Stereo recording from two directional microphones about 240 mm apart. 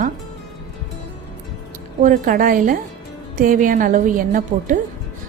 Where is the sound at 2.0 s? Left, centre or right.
Right.